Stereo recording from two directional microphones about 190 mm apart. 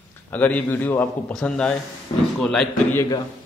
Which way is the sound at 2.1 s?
25° left (ahead or behind).